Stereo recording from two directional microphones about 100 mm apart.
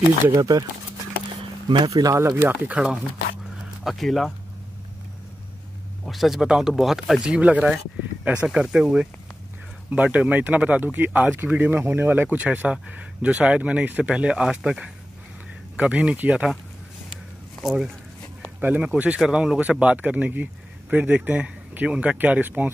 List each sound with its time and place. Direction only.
0.3 s speech: 35° right (ahead or behind)
1.9 s speech: 35° right (ahead or behind); by 3.0 s 15° right (ahead or behind)
3.8 s speech: centre (ahead or behind)
6.0 s speech: centre (ahead or behind)
7.2 s speech: 15° right (ahead or behind)
18.6 s speech: 15° right (ahead or behind)